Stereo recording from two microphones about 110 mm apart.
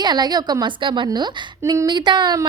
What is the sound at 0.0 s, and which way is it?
A woman's voice, 40° right (ahead or behind).